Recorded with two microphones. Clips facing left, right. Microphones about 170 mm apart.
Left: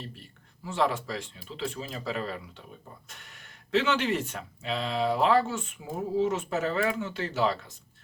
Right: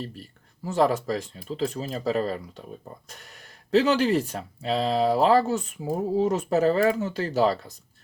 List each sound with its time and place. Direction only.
0.0 s speech: 40° right (ahead or behind)